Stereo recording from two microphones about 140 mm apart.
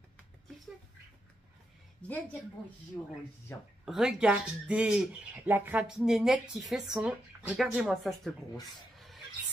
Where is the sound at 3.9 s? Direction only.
5° right (ahead or behind).